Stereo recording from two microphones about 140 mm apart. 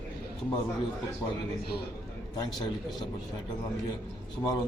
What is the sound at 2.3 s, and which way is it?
Speech, 30° left (ahead or behind).